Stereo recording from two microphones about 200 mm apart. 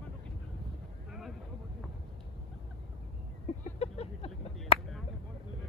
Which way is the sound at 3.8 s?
30° left (ahead or behind).